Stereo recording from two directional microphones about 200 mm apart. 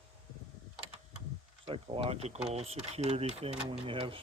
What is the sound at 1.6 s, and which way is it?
Speech, 30° right (ahead or behind).